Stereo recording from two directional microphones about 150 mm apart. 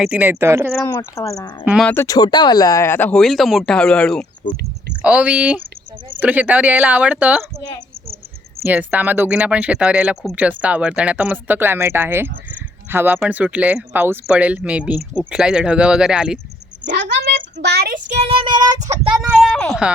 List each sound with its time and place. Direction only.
0.0 s speech: 10° right (ahead or behind)
0.9 s speech: 20° left (ahead or behind)
1.8 s speech: 10° left (ahead or behind)
2.0 s speech: 25° left (ahead or behind); by 4.3 s 5° left (ahead or behind)
5.0 s speech: 10° right (ahead or behind)
8.6 s speech: 10° right (ahead or behind)
17.2 s speech: 90° right
18.1 s child singing: 45° right (ahead or behind)
18.9 s speech: 10° right (ahead or behind)